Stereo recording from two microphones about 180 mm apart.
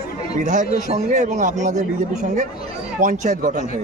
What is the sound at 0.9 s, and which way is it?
Speech, 45° right (ahead or behind).